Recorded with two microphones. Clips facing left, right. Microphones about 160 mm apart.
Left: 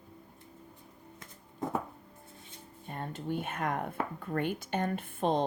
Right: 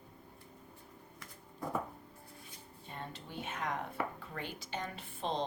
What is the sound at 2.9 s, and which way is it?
A woman's voice, 50° left (ahead or behind).